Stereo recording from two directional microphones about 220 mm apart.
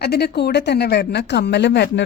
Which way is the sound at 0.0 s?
45° left (ahead or behind).